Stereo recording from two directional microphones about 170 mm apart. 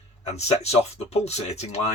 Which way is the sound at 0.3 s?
40° left (ahead or behind).